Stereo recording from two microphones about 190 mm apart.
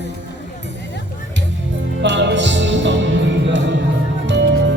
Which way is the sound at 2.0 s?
70° right (ahead or behind).